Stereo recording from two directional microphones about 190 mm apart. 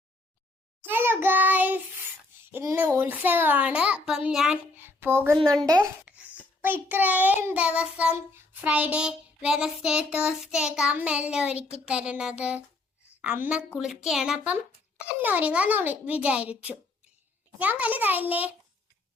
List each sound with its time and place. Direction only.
0.8 s child singing: 10° right (ahead or behind)
5.6 s a child's voice: 20° right (ahead or behind)
6.1 s babbling: 10° right (ahead or behind)
6.6 s child singing: 10° right (ahead or behind)
11.9 s a sound: 5° right (ahead or behind)
13.2 s child singing: 10° right (ahead or behind)